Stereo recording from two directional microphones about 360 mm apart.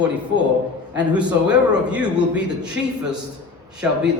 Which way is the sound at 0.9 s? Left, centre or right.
Centre.